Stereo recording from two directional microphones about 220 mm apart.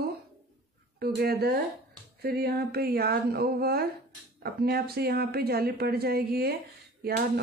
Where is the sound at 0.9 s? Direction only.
45° right (ahead or behind).